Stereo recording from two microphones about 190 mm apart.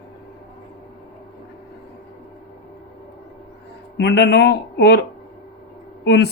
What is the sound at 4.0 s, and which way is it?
A man's voice, 60° left (ahead or behind).